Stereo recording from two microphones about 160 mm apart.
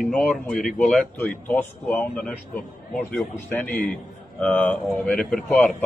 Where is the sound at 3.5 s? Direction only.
10° left (ahead or behind).